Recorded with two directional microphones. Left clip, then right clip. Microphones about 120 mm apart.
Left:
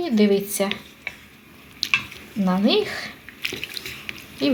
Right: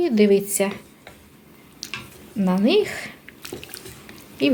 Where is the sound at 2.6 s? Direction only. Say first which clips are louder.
Right 2 dB; 40° right (ahead or behind).